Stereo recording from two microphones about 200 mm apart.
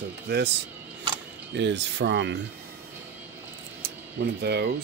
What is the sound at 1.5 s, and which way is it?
Cattle, 60° right (ahead or behind).